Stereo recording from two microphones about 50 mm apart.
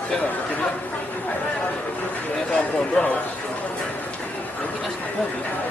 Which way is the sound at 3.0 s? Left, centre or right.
Left.